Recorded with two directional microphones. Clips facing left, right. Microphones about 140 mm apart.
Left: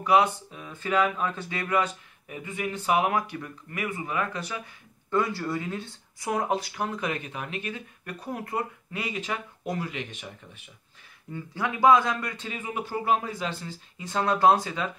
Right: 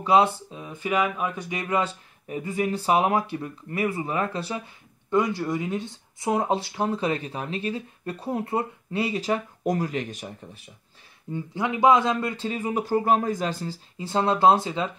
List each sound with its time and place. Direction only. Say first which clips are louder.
0.0 s speech: right 2 dB; 25° right (ahead or behind)
5.1 s speech: right 3 dB; 20° right (ahead or behind); by 10.7 s 35° right (ahead or behind)
11.3 s speech: right 4 dB; 20° right (ahead or behind)